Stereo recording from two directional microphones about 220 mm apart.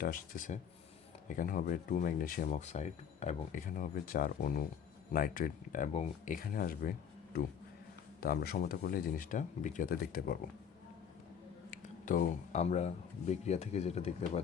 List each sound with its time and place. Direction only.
0.0 s speech: 40° left (ahead or behind)
8.2 s speech: 40° left (ahead or behind)
11.7 s speech: 35° left (ahead or behind)